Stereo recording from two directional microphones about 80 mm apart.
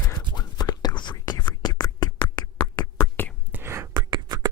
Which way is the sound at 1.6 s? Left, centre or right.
Left.